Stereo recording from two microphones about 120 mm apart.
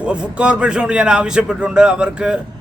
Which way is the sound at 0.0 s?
10° right (ahead or behind).